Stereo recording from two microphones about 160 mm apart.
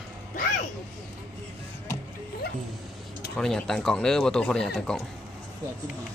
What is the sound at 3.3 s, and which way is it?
Speech, centre (ahead or behind).